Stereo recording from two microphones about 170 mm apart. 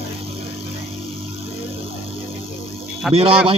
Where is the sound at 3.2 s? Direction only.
30° right (ahead or behind).